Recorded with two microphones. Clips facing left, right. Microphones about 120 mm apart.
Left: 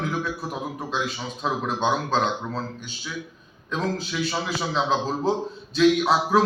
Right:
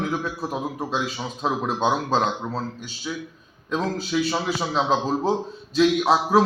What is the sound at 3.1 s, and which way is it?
Speech, 20° right (ahead or behind).